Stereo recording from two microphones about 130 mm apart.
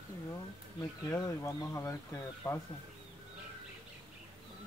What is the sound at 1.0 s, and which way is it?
Speech, 20° left (ahead or behind).